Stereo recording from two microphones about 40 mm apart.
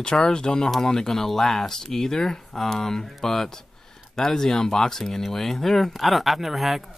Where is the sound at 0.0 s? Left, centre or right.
Centre.